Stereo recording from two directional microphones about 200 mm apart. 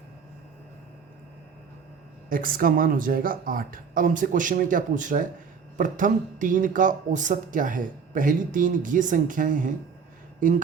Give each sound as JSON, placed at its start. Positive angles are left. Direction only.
{"t": 2.3, "sound": "speech", "side_deg": -45}